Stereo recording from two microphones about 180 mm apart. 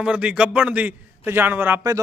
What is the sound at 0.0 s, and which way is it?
A man's voice, 5° right (ahead or behind).